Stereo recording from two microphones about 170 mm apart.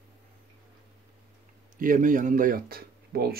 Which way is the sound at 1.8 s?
50° right (ahead or behind).